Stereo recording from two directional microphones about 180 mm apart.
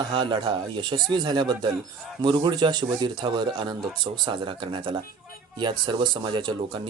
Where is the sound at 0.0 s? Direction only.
25° right (ahead or behind).